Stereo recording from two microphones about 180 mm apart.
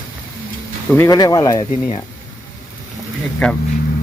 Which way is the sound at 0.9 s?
15° left (ahead or behind).